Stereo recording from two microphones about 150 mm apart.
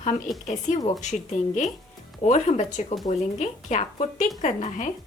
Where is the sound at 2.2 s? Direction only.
55° left (ahead or behind).